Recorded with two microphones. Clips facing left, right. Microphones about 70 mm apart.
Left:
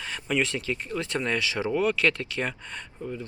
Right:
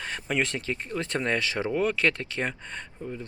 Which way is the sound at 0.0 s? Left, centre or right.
Right.